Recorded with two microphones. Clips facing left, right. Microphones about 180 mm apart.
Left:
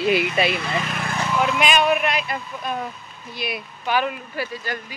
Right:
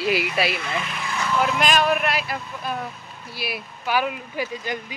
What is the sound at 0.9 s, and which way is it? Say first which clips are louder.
Vehicle: left 3 dB; 55° left (ahead or behind).